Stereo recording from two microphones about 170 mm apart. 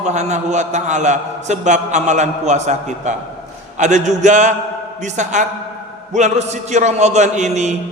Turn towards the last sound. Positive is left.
turn(degrees=-45)  # may be behind; listen again after turning